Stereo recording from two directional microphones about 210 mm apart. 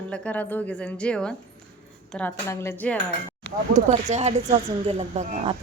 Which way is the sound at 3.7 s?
35° right (ahead or behind).